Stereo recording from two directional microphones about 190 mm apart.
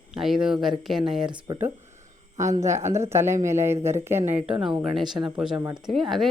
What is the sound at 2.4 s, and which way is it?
Speech, 15° right (ahead or behind).